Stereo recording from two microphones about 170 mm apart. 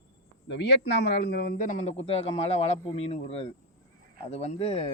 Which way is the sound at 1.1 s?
70° left (ahead or behind).